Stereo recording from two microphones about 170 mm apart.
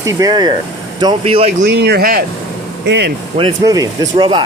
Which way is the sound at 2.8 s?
90° right.